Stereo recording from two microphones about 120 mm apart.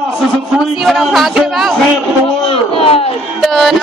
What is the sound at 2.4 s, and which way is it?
Speech, 50° left (ahead or behind).